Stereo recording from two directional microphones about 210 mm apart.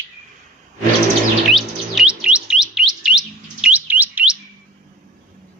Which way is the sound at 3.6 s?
10° right (ahead or behind).